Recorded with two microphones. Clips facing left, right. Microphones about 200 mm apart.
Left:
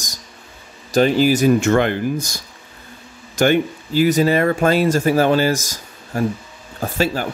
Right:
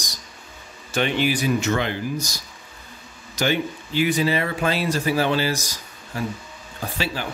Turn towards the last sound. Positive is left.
turn(degrees=45)  # may be behind; listen again after turning